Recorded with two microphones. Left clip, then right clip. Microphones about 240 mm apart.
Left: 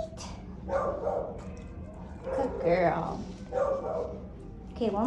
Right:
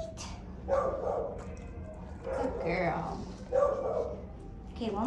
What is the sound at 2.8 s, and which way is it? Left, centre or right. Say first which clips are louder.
Speech: left 5 dB; left.